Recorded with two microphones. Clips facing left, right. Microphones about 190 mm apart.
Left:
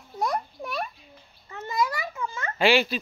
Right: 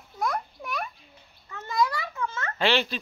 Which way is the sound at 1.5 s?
20° left (ahead or behind).